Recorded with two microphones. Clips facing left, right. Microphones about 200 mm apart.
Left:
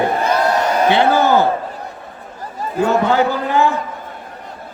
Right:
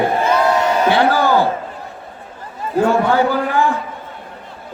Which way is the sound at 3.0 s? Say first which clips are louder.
Even; 25° left (ahead or behind).